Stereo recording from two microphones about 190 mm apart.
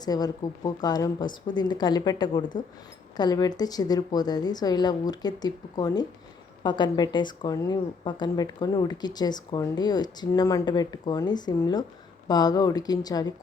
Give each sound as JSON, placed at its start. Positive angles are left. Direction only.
{"t": 0.0, "sound": "speech", "side_deg": 20}